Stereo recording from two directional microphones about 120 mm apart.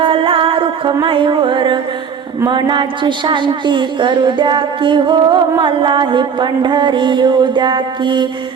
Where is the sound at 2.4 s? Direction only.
40° right (ahead or behind).